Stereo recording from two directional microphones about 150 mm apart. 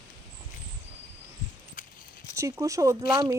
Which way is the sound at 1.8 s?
60° left (ahead or behind).